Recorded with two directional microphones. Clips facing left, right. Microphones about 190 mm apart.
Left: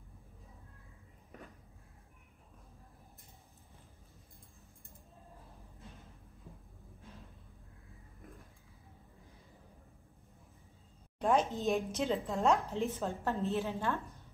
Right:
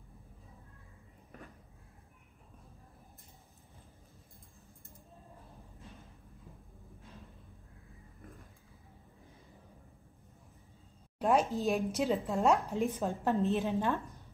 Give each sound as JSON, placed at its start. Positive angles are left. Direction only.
{"t": 11.1, "sound": "a woman's voice", "side_deg": -5}
{"t": 12.7, "sound": "a woman's voice", "side_deg": -15}